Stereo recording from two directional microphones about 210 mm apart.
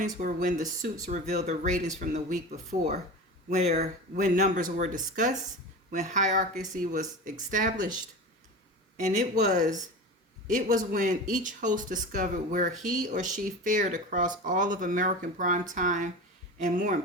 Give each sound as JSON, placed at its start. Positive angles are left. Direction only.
{"t": 0.0, "sound": "speech", "side_deg": -35}
{"t": 9.0, "sound": "speech", "side_deg": -35}